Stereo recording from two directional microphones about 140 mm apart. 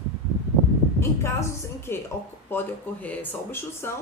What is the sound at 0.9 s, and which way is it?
A woman's voice, 20° left (ahead or behind).